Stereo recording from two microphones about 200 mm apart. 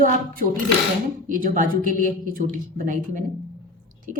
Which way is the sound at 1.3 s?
40° right (ahead or behind).